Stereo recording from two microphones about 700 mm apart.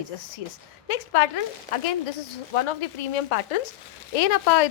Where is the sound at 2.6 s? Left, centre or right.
Left.